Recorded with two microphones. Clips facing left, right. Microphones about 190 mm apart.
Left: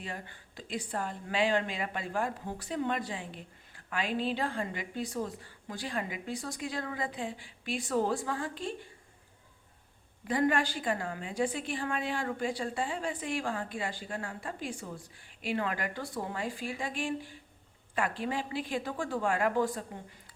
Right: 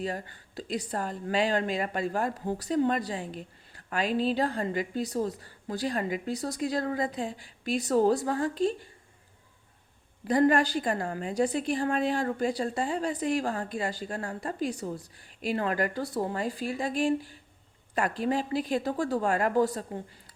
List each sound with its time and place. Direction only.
0.0 s a woman's voice: 40° right (ahead or behind)
10.2 s a woman's voice: 40° right (ahead or behind)